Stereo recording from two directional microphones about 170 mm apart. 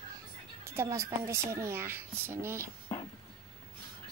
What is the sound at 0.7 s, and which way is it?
A woman's voice, 15° right (ahead or behind).